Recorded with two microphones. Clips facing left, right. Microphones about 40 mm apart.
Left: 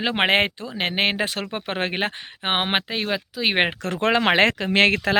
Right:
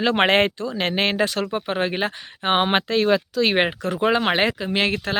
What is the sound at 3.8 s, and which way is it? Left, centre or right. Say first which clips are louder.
Speech: right 1 dB; left.